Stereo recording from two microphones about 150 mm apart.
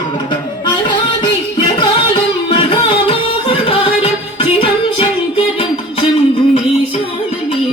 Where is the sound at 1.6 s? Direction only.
35° left (ahead or behind).